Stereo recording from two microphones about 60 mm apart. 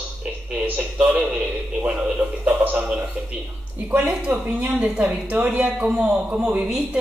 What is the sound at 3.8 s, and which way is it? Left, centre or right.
A woman's voice, right.